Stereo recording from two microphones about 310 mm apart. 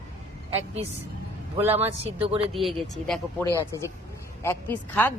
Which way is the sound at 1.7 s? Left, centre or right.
Centre.